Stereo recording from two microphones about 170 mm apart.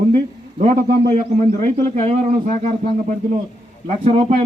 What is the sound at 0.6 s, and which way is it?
A man's voice, 50° right (ahead or behind).